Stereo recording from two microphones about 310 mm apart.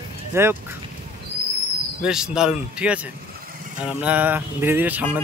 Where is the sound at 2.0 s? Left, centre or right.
Centre.